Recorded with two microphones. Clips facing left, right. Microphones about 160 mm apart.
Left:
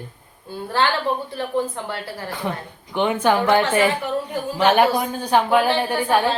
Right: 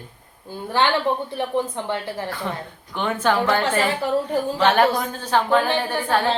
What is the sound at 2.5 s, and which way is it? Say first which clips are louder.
A woman's voice: left 2 dB; 15° left (ahead or behind).